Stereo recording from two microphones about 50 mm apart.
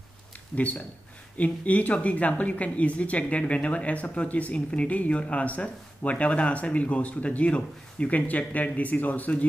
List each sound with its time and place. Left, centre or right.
0.6 s speech: left